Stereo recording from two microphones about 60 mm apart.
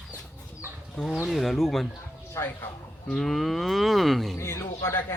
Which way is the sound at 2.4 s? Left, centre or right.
Left.